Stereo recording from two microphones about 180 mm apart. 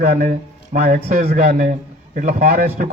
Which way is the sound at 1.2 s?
40° right (ahead or behind).